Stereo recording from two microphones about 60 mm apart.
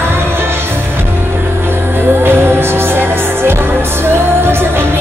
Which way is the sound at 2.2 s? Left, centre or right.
Right.